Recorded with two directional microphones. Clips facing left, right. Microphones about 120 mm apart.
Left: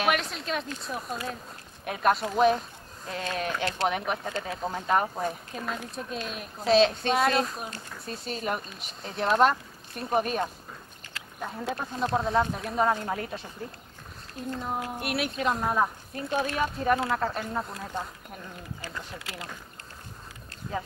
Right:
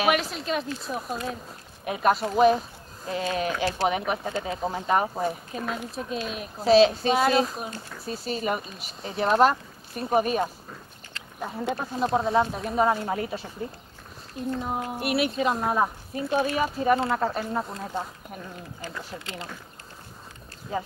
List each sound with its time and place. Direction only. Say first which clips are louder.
0.0 s speech: right 3 dB; 5° right (ahead or behind)
14.5 s speech: right 2 dB; 5° right (ahead or behind)
19.1 s speech: right 3 dB; 30° right (ahead or behind)
20.7 s speech: right 3 dB; 5° right (ahead or behind)